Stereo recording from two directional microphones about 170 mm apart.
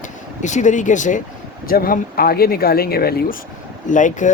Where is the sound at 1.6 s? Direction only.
60° left (ahead or behind).